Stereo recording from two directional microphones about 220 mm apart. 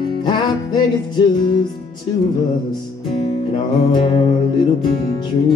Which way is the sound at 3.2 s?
25° left (ahead or behind).